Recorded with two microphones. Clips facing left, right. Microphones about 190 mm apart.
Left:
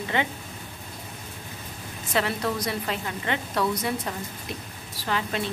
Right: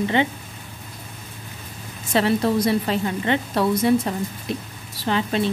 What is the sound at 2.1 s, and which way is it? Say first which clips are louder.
A woman's voice: right 7 dB; 30° right (ahead or behind).